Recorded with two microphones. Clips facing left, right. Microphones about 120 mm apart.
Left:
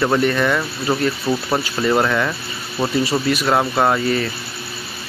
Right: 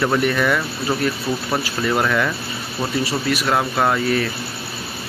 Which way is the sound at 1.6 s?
5° left (ahead or behind).